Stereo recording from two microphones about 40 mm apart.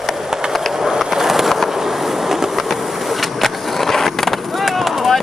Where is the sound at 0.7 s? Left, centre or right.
Centre.